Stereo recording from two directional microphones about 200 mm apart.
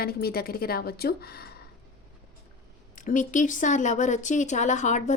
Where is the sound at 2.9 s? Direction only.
40° left (ahead or behind).